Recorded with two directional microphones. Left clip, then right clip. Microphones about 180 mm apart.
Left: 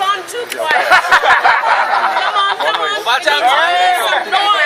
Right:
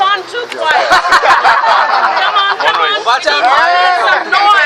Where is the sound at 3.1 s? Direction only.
15° right (ahead or behind).